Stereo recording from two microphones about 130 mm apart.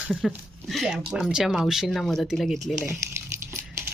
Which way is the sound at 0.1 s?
Centre (ahead or behind).